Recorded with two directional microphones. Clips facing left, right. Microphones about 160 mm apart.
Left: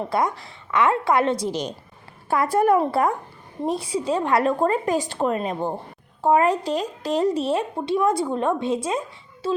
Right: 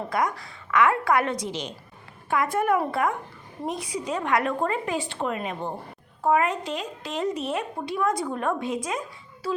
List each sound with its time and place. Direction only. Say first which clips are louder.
0.1 s a woman's voice: left 1 dB; 25° left (ahead or behind)
1.5 s a woman's voice: left 6 dB; 40° left (ahead or behind)